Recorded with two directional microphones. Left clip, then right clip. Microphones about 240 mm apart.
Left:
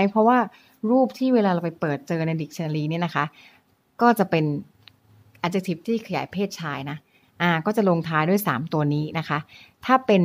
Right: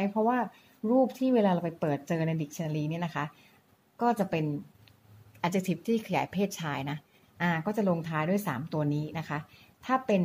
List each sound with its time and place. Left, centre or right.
0.0 s speech: left
5.4 s speech: centre